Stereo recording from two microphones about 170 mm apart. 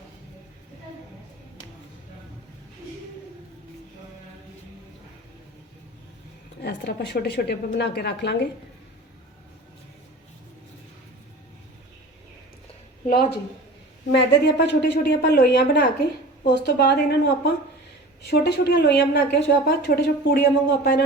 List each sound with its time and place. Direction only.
6.6 s a woman's voice: 75° left (ahead or behind)
14.2 s a woman's voice: 85° left; by 21.0 s 70° left (ahead or behind)